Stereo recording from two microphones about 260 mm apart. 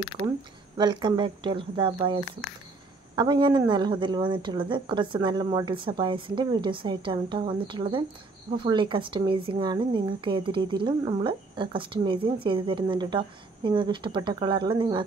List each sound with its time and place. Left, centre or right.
0.7 s a woman's voice: centre